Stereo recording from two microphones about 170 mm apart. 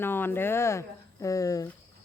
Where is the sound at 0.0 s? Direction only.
15° left (ahead or behind).